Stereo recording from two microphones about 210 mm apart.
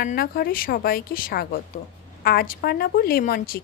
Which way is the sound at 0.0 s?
45° left (ahead or behind).